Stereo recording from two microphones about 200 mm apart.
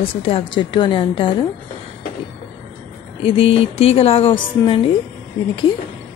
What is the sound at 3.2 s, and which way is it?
Speech, 30° left (ahead or behind).